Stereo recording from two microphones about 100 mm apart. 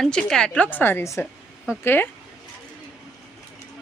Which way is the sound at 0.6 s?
20° left (ahead or behind).